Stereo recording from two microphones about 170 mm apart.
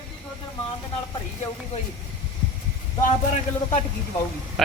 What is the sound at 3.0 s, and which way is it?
Speech, 45° left (ahead or behind).